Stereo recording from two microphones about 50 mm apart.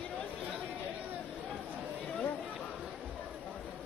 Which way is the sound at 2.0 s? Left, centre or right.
Left.